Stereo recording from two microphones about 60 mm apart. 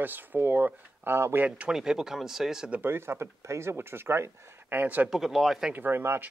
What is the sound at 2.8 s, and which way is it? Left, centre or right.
Speech, right.